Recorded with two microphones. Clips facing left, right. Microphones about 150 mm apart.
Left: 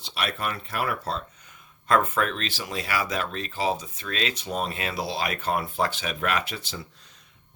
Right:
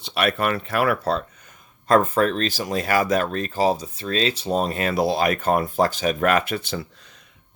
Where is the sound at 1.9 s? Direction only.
35° right (ahead or behind); by 6.8 s 60° right (ahead or behind).